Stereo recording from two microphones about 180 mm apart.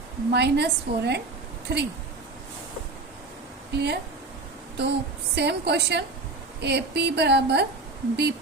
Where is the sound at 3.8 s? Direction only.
65° right (ahead or behind).